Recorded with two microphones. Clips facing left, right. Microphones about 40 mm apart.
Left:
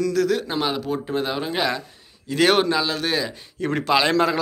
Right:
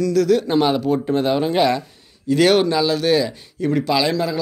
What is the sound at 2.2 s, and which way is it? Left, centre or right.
A man's voice, centre.